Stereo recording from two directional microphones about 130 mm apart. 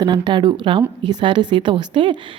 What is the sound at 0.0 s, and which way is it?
Speech, 35° right (ahead or behind).